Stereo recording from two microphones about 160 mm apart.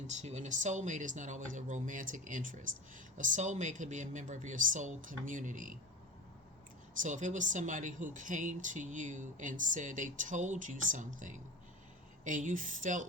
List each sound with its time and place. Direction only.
0.1 s speech: 45° right (ahead or behind)
7.0 s speech: 50° right (ahead or behind)